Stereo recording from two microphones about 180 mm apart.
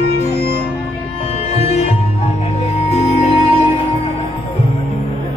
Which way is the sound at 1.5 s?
35° left (ahead or behind).